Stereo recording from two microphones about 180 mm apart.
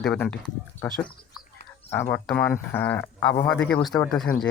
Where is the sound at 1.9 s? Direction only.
10° left (ahead or behind).